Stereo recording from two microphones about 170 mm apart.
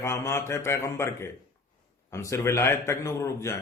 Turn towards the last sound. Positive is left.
turn(degrees=15)  # may be behind; listen again after turning